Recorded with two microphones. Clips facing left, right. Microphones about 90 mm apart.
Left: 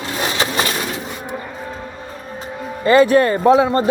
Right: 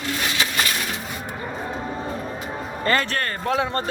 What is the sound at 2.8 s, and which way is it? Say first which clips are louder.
Speech: left 12 dB; 10° left (ahead or behind).